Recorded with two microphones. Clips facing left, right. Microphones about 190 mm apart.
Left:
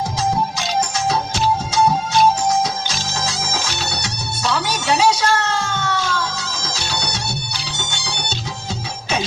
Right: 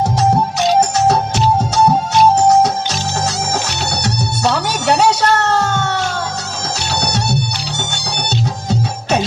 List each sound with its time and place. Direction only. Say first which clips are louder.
0.8 s music: right 4 dB; 65° right (ahead or behind)
4.0 s music: right 7 dB; 65° right (ahead or behind)